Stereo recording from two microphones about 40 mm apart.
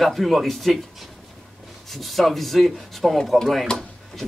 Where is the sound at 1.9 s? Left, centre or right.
Centre.